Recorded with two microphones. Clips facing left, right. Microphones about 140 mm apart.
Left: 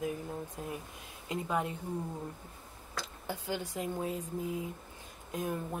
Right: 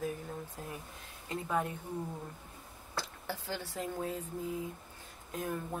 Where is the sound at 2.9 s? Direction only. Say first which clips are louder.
Even; 20° left (ahead or behind).